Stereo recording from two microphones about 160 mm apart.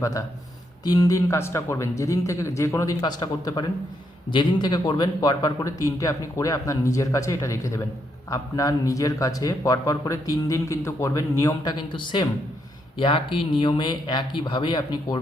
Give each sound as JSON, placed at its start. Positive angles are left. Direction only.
{"t": 0.0, "sound": "a man's voice", "side_deg": 20}